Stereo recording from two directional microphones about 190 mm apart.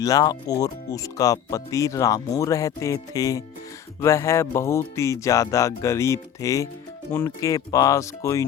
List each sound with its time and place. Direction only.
0.0 s speech: 20° left (ahead or behind)